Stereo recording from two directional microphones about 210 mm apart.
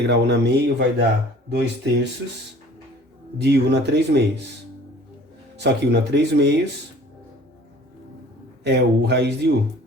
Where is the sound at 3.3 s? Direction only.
55° right (ahead or behind).